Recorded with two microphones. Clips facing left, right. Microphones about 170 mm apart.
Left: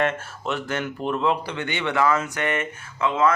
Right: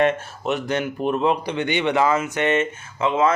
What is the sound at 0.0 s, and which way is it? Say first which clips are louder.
Speech: right 5 dB; 15° right (ahead or behind).